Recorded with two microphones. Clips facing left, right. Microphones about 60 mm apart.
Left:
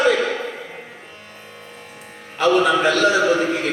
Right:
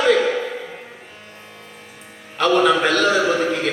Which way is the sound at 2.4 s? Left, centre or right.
Right.